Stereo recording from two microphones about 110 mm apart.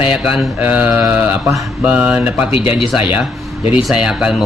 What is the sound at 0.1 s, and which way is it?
Speech, 10° right (ahead or behind).